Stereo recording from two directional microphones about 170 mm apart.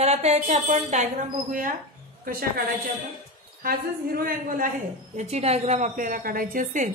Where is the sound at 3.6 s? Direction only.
60° right (ahead or behind).